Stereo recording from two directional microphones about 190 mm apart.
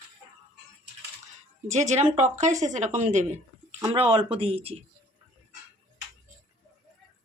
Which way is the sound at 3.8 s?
25° right (ahead or behind).